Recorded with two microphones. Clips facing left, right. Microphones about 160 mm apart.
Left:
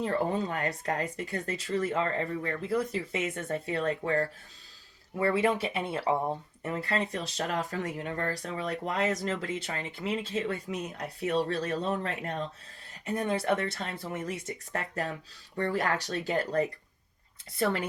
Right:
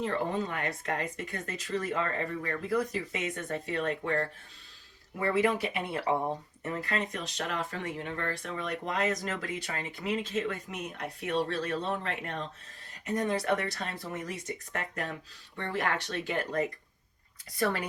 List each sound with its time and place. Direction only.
0.0 s speech: 35° left (ahead or behind)
5.2 s speech: 30° left (ahead or behind)
13.1 s speech: 30° left (ahead or behind)